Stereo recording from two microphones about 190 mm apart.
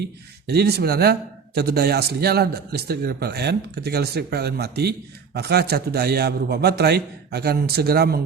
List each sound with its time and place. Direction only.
0.0 s a man's voice: 60° right (ahead or behind)